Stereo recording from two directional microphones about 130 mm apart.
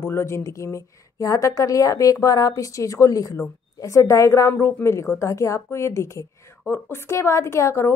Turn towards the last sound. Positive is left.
turn(degrees=20)  # may be behind; listen again after turning